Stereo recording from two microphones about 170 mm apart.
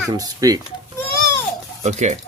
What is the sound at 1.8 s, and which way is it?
Speech, 45° right (ahead or behind).